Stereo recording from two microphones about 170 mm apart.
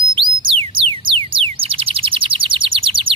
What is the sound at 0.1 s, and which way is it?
Music, 30° right (ahead or behind).